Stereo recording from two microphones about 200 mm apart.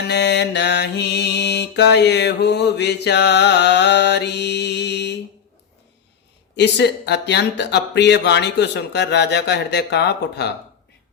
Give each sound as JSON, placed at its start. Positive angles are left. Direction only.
{"t": 0.1, "sound": "mantra", "side_deg": 55}
{"t": 6.6, "sound": "mantra", "side_deg": 60}